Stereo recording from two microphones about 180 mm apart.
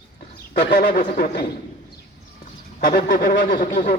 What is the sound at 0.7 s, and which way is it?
Speech, 50° left (ahead or behind).